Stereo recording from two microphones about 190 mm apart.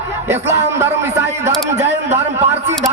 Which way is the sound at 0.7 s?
15° right (ahead or behind).